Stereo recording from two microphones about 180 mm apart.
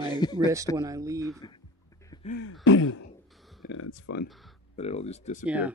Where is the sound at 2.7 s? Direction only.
90° left.